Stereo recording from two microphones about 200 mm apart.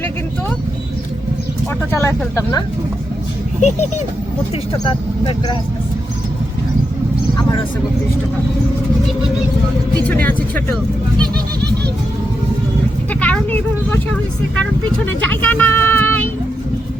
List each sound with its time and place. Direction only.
2.0 s speech: 15° left (ahead or behind)
3.6 s speech: 35° left (ahead or behind)
4.7 s speech: 25° left (ahead or behind)
10.2 s speech: 10° left (ahead or behind)
13.1 s speech: 5° left (ahead or behind)
15.2 s speech: 10° left (ahead or behind)